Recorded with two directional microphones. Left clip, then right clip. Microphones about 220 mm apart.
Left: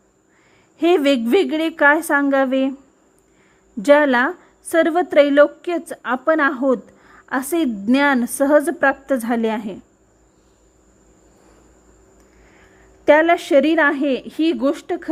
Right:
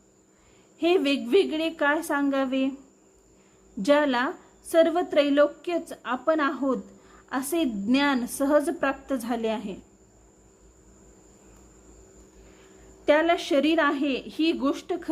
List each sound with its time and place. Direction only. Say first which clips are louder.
0.8 s a woman's voice: left 8 dB; 35° left (ahead or behind)
3.8 s a woman's voice: left 9 dB; 35° left (ahead or behind)
13.1 s a woman's voice: left 8 dB; 35° left (ahead or behind)